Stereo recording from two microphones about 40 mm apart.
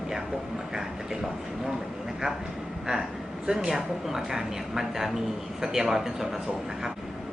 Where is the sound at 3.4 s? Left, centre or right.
Centre.